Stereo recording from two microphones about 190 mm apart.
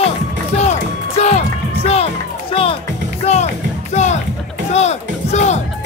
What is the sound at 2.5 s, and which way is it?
Music, 30° left (ahead or behind).